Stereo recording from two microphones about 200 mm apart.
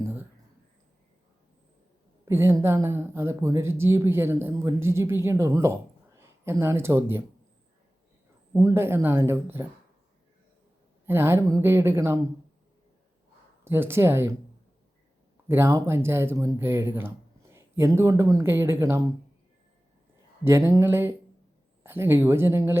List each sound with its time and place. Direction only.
0.0 s a sound: 10° right (ahead or behind)
2.2 s speech: 15° right (ahead or behind)
8.5 s speech: 15° right (ahead or behind)
11.0 s speech: 10° right (ahead or behind)
13.7 s speech: 10° right (ahead or behind)
15.4 s speech: 10° right (ahead or behind)
20.4 s speech: 15° right (ahead or behind)